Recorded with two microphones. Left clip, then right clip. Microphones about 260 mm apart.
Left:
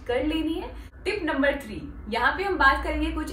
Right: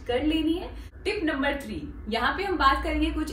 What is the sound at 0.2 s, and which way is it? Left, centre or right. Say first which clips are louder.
A woman's voice: right 1 dB; centre.